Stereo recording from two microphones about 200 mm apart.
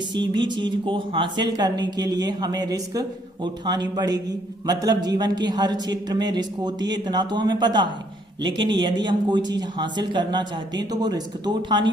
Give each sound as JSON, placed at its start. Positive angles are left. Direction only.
{"t": 0.3, "sound": "speech", "side_deg": -20}